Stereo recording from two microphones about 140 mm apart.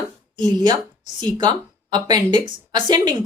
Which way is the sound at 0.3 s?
30° right (ahead or behind).